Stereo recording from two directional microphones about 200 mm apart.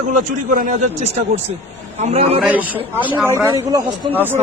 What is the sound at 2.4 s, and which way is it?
A man's voice, 10° right (ahead or behind).